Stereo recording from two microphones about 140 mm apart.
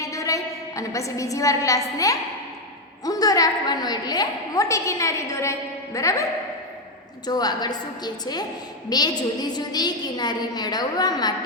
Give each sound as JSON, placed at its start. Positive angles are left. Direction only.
{"t": 0.0, "sound": "a woman's voice", "side_deg": 25}
{"t": 7.3, "sound": "a woman's voice", "side_deg": 30}